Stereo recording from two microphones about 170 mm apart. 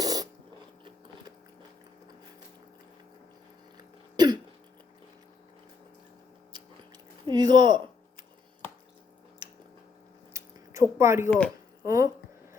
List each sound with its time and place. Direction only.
0.0 s a sound: 20° right (ahead or behind)
3.8 s throat clearing: 25° right (ahead or behind)
7.3 s speech: 25° right (ahead or behind)
10.3 s a sound: 15° right (ahead or behind)
11.3 s speech: 5° left (ahead or behind)
11.9 s speech: 20° right (ahead or behind)